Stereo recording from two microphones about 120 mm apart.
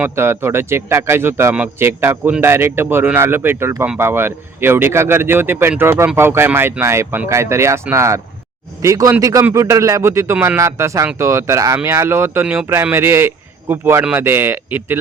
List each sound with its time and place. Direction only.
0.0 s speech: 20° right (ahead or behind)